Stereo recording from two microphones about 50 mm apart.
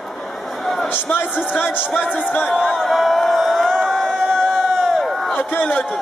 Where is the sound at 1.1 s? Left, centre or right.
Left.